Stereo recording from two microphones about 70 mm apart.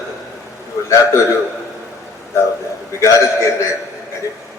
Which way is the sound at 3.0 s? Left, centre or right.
Left.